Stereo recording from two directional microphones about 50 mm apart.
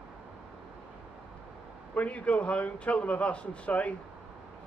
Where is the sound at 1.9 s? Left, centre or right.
Left.